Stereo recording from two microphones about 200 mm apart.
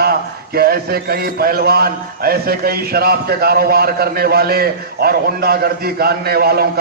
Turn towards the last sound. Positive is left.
turn(degrees=-50)  # may be behind; listen again after turning